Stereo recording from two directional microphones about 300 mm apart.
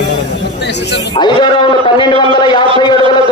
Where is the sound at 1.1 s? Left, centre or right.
Centre.